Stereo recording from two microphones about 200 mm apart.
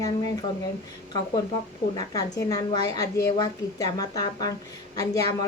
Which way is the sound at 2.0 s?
20° left (ahead or behind).